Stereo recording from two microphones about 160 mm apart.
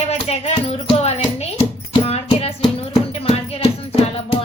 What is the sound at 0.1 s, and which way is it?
Music, 40° left (ahead or behind).